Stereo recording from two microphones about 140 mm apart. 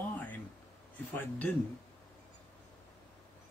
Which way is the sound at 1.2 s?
15° left (ahead or behind).